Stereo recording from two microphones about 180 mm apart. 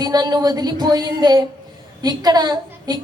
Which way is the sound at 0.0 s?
20° right (ahead or behind).